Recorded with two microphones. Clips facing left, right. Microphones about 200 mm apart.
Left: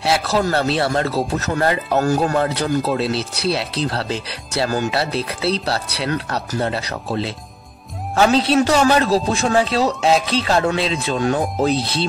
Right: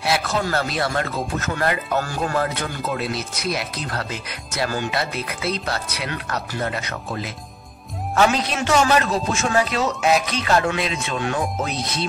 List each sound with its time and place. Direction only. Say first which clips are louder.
0.0 s speech: left 4 dB; 30° left (ahead or behind)
2.3 s speech: left 6 dB; 30° left (ahead or behind)